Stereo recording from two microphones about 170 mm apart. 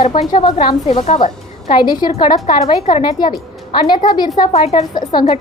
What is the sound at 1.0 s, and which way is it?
Speech, 40° left (ahead or behind).